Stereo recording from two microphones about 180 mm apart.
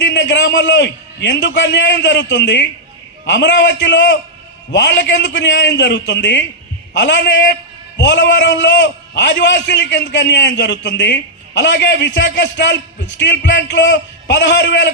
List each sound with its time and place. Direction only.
0.0 s a man's voice: 75° left (ahead or behind)